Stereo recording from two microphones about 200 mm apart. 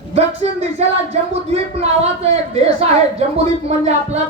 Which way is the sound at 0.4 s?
30° right (ahead or behind).